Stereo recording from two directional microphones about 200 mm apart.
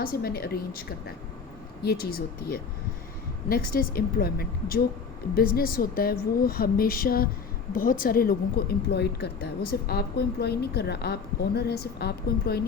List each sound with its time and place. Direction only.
0.0 s a woman's voice: 45° left (ahead or behind)